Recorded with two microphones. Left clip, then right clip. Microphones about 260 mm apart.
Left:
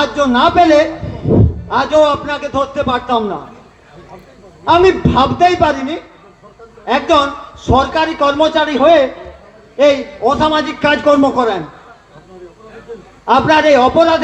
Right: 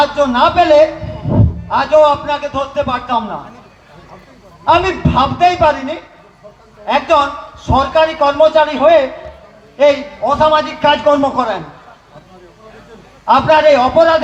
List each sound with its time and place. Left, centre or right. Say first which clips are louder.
0.0 s a man's voice: right 1 dB; left
4.6 s a man's voice: left 2 dB; left
6.8 s a man's voice: even; left
13.2 s a man's voice: right 1 dB; left